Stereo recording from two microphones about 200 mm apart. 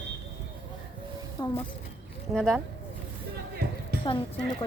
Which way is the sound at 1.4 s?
20° left (ahead or behind).